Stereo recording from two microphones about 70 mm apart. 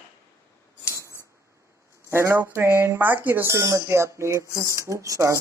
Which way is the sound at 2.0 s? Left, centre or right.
Right.